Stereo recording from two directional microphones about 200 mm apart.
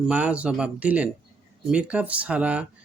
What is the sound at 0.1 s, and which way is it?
Speech, 5° right (ahead or behind).